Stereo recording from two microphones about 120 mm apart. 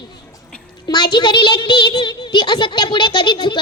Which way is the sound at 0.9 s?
40° left (ahead or behind).